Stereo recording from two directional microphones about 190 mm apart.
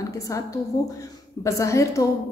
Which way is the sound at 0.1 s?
15° left (ahead or behind).